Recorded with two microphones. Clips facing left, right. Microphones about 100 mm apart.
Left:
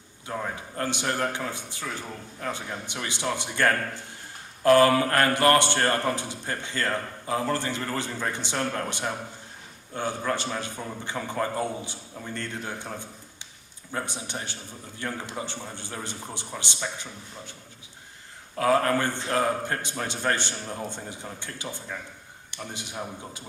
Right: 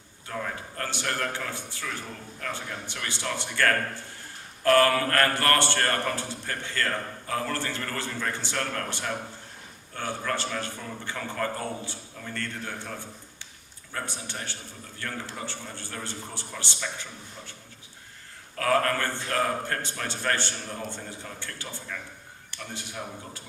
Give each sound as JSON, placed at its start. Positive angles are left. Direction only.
{"t": 0.3, "sound": "a man's voice", "side_deg": 20}
{"t": 18.5, "sound": "a man's voice", "side_deg": 20}